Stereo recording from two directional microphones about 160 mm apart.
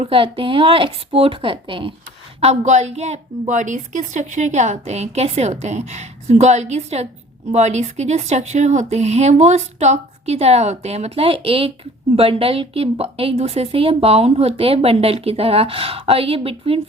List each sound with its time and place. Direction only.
0.0 s a woman's voice: 35° right (ahead or behind)
2.4 s a woman's voice: 45° right (ahead or behind)